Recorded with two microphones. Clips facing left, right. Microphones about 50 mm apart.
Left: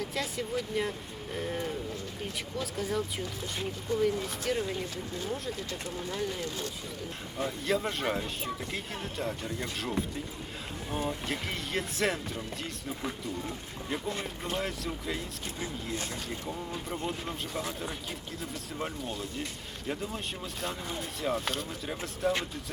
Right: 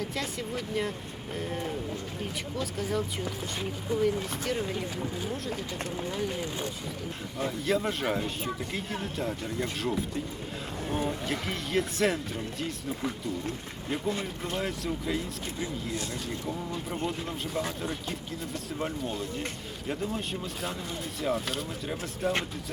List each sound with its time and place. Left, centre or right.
0.0 s speech: centre
6.2 s speech: right
7.3 s speech: centre
14.1 s speech: right
14.5 s speech: centre
16.5 s speech: centre
18.8 s speech: centre